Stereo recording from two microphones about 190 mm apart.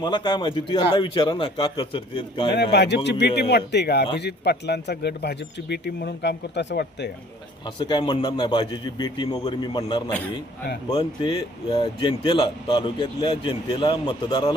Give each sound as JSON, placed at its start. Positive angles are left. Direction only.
{"t": 0.0, "sound": "speech", "side_deg": 25}
{"t": 2.7, "sound": "speech", "side_deg": 65}
{"t": 7.8, "sound": "speech", "side_deg": 25}